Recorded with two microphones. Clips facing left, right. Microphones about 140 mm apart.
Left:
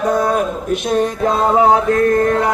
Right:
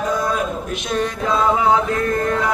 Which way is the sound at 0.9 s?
45° left (ahead or behind).